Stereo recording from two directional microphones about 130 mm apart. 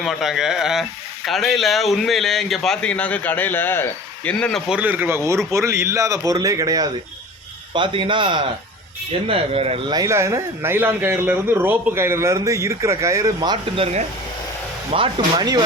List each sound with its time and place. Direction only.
0.0 s speech: centre (ahead or behind)
4.7 s speech: 15° right (ahead or behind); by 6.9 s 30° right (ahead or behind)
7.7 s a man's voice: 40° right (ahead or behind)
9.9 s speech: 25° right (ahead or behind)
14.9 s a man's voice: 40° right (ahead or behind)